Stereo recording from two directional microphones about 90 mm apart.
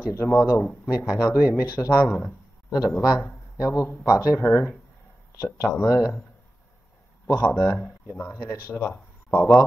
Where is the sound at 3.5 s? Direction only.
40° left (ahead or behind).